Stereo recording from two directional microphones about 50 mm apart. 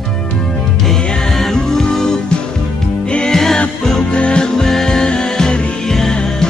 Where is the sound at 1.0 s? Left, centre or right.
Centre.